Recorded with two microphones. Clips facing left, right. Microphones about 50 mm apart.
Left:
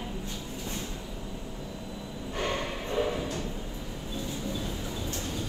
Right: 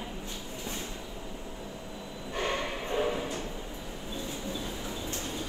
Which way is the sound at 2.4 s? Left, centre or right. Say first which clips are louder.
Even; right.